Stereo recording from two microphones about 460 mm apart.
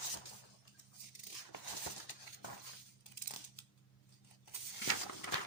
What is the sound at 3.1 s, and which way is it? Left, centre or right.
Scissors, left.